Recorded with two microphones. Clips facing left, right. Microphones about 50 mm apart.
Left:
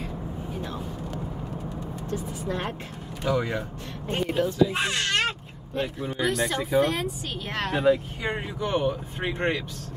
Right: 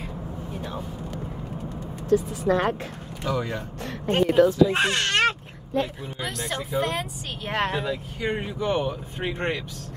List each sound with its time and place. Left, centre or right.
0.6 s vehicle: centre
2.0 s speech: right
3.3 s speech: centre
4.1 s speech: right
4.7 s speech: right
6.2 s speech: centre
7.7 s speech: left
8.5 s speech: centre